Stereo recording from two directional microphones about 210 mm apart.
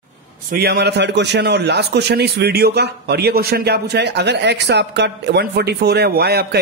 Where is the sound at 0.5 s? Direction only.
50° right (ahead or behind).